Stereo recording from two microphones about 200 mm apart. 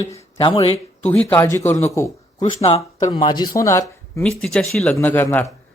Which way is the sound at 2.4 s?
30° left (ahead or behind).